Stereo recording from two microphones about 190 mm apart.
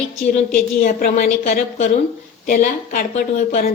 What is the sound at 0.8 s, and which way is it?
A woman's voice, 45° left (ahead or behind).